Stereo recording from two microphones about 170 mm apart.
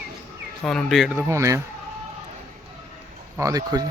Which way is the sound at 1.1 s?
15° right (ahead or behind).